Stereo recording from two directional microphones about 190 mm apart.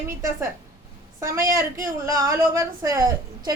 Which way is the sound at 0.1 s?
10° right (ahead or behind).